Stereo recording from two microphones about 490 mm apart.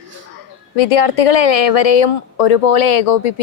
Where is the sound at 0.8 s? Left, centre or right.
Left.